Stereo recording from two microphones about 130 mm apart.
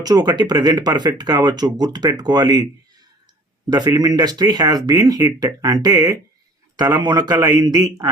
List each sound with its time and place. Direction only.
0.0 s speech: 30° right (ahead or behind)
3.7 s speech: 30° right (ahead or behind)